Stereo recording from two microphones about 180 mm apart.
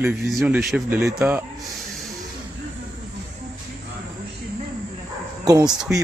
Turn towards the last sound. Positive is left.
turn(degrees=0)  # may be behind; listen again after turning